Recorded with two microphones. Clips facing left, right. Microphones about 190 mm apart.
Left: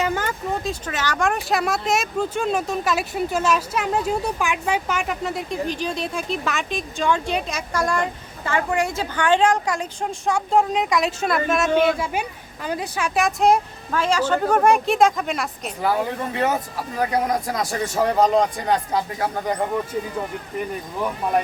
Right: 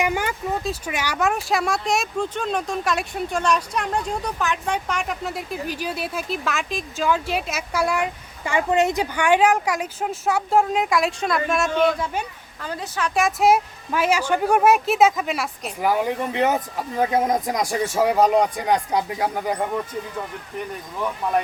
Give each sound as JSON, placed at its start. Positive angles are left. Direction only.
{"t": 0.0, "sound": "a sound", "side_deg": -15}
{"t": 0.6, "sound": "speech", "side_deg": -10}
{"t": 13.1, "sound": "speech", "side_deg": 0}
{"t": 15.8, "sound": "speech", "side_deg": -15}